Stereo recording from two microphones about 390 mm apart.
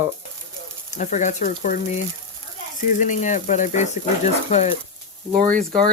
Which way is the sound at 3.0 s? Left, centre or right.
Centre.